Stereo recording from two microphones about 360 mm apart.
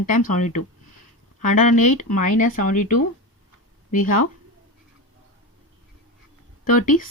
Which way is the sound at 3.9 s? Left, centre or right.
Left.